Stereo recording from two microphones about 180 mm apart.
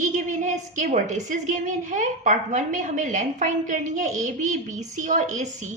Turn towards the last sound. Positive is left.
turn(degrees=-40)  # may be behind; listen again after turning